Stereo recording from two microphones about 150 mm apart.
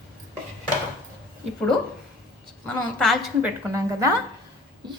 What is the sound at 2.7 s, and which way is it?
Speech, centre (ahead or behind).